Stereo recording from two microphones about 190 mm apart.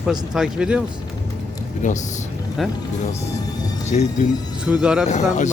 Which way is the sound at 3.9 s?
35° left (ahead or behind).